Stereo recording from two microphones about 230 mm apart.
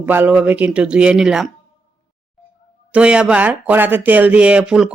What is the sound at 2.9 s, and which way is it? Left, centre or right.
Speech, centre.